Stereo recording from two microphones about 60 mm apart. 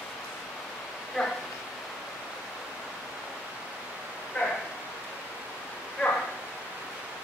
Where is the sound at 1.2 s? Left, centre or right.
Centre.